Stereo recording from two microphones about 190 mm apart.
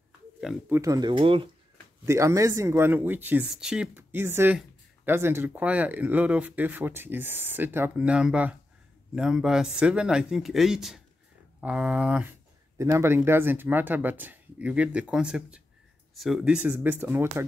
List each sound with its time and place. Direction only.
0.4 s speech: centre (ahead or behind)
0.7 s speech: 20° right (ahead or behind)
2.0 s speech: 15° right (ahead or behind)